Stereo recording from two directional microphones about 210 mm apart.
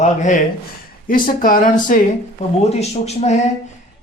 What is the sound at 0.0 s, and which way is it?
Speech, 35° left (ahead or behind).